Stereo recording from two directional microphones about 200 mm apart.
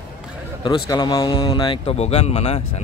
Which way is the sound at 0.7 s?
20° left (ahead or behind).